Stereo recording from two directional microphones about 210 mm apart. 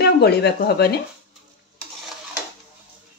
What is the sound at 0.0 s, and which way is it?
Speech, 50° left (ahead or behind).